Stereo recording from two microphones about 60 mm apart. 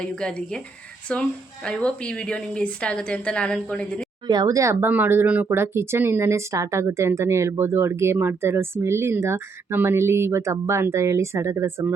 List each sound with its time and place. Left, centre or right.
0.0 s a woman's voice: centre
4.4 s speech: right
4.9 s speech: right